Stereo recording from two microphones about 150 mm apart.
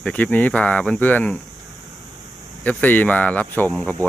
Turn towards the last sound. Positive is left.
turn(degrees=5)  # may be behind; listen again after turning